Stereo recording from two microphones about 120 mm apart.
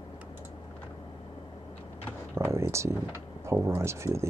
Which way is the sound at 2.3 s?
20° right (ahead or behind).